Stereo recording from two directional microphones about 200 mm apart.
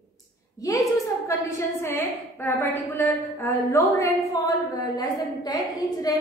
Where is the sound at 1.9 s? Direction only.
10° left (ahead or behind).